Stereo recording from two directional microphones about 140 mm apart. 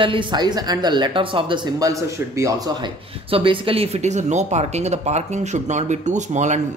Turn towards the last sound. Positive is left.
turn(degrees=-60)  # may be behind; listen again after turning